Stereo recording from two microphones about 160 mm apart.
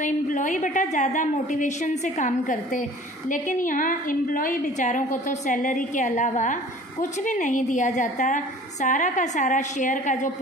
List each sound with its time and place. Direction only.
0.0 s a woman's voice: 50° left (ahead or behind)